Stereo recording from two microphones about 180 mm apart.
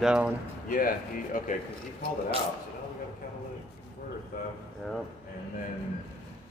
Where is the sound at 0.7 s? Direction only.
50° left (ahead or behind).